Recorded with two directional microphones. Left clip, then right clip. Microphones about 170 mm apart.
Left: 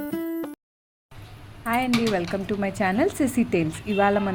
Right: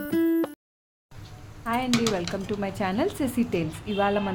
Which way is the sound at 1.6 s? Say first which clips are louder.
Left 2 dB; 20° left (ahead or behind).